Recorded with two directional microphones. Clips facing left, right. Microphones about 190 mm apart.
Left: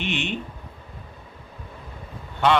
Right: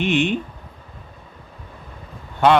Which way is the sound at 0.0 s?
50° right (ahead or behind).